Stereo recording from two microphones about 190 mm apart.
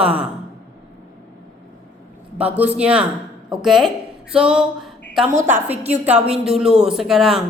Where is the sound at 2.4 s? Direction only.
10° right (ahead or behind).